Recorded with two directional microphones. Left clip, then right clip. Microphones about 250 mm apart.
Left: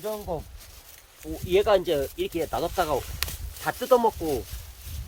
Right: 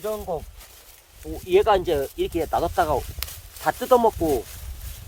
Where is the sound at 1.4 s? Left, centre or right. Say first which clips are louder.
Right 3 dB; centre.